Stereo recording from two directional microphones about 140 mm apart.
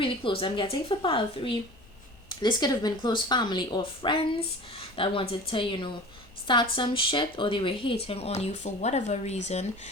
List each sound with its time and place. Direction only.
0.0 s speech: 40° left (ahead or behind)